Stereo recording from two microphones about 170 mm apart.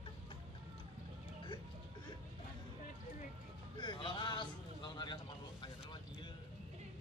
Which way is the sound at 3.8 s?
25° left (ahead or behind).